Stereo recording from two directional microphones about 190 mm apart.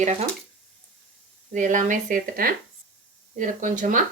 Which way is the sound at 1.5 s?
40° right (ahead or behind).